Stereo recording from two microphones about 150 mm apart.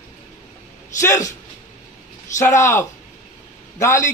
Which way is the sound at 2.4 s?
20° left (ahead or behind).